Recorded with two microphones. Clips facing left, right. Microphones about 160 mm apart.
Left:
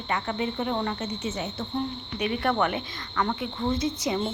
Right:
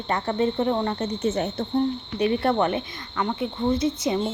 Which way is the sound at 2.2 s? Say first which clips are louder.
Right 4 dB; 30° right (ahead or behind).